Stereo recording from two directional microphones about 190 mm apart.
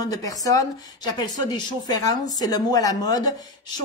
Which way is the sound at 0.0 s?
20° left (ahead or behind).